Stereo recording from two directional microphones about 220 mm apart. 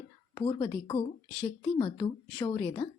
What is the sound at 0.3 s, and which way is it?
Speech, 20° left (ahead or behind).